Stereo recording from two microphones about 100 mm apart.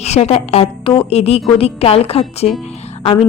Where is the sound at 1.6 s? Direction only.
75° left (ahead or behind).